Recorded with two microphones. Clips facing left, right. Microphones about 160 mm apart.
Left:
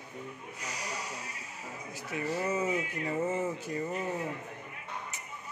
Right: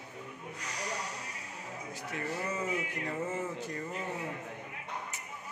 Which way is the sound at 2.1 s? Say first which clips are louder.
Left 5 dB; 10° left (ahead or behind).